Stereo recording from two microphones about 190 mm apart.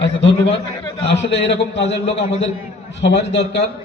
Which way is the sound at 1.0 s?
65° left (ahead or behind).